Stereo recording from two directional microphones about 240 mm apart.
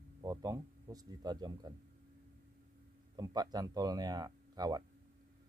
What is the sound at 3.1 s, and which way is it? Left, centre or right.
Speech, centre.